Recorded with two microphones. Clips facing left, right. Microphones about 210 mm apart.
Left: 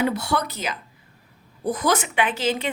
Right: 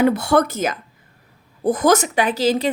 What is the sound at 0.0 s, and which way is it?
A woman's voice, 50° right (ahead or behind).